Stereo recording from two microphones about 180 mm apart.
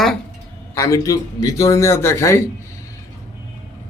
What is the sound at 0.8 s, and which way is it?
A man's voice, 20° left (ahead or behind).